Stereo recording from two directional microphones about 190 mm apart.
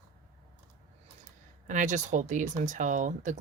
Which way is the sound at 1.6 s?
40° right (ahead or behind).